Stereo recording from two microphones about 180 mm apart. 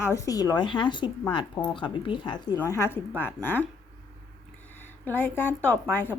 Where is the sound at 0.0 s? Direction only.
15° left (ahead or behind).